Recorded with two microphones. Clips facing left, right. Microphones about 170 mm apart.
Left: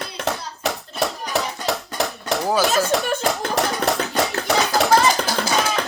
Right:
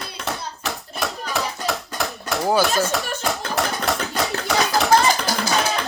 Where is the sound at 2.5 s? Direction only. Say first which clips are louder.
Even; centre (ahead or behind).